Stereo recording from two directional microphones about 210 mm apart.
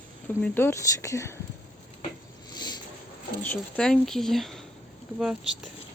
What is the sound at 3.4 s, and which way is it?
Speech, 5° left (ahead or behind).